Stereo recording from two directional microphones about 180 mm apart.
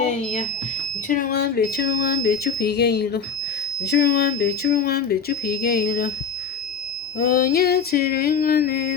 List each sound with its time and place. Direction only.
0.1 s smoke detector: 40° left (ahead or behind)
1.0 s speech: 50° left (ahead or behind)
7.2 s speech: 55° left (ahead or behind)